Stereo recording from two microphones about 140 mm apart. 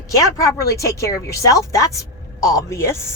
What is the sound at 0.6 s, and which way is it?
Speech, 20° left (ahead or behind).